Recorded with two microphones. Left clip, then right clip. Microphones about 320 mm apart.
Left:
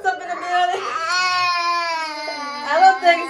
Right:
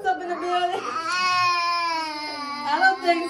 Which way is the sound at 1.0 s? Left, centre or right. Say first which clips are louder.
Left 2 dB; centre.